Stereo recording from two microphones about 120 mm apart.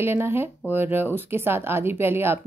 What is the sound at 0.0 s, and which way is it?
Speech, 20° right (ahead or behind).